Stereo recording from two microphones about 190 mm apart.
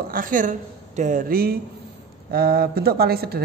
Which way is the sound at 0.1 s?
45° right (ahead or behind).